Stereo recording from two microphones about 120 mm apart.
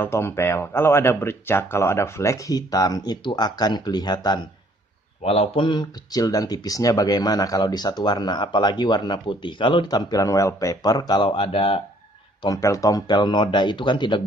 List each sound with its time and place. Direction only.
0.0 s speech: 20° left (ahead or behind); by 4.5 s 35° left (ahead or behind)
5.2 s speech: 55° left (ahead or behind)
5.7 s speech: 35° left (ahead or behind)
12.4 s speech: 25° left (ahead or behind)